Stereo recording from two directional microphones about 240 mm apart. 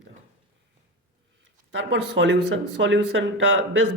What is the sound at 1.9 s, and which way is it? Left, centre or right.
Speech, right.